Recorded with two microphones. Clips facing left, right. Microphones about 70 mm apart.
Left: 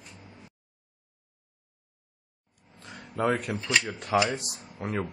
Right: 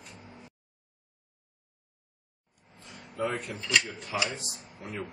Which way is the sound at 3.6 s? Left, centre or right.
Left.